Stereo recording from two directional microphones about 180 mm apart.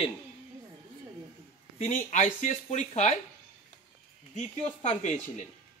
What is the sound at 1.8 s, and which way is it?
A man's voice, 40° left (ahead or behind).